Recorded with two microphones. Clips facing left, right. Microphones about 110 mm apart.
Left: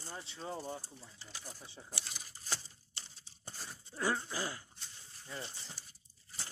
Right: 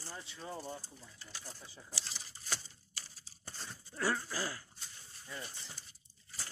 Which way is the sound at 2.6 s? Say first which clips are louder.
Right 1 dB; 25° left (ahead or behind).